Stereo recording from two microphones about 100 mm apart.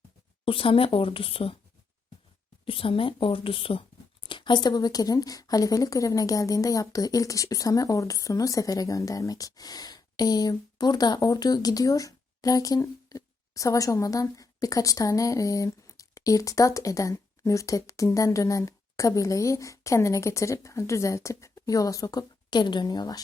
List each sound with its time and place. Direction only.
0.4 s a woman's voice: 65° left (ahead or behind)
2.6 s speech: 65° left (ahead or behind); by 23.2 s 40° left (ahead or behind)